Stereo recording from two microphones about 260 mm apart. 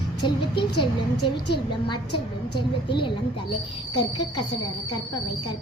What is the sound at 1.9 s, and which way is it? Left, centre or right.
A woman's voice, centre.